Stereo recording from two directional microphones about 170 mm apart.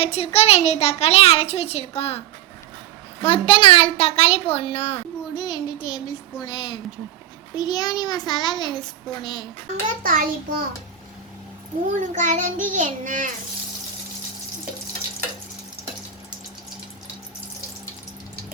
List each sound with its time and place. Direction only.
0.0 s a woman's voice: 35° left (ahead or behind)
3.2 s a woman's voice: 30° left (ahead or behind)
10.0 s a child's voice: 55° right (ahead or behind)
11.9 s a child's voice: 50° right (ahead or behind)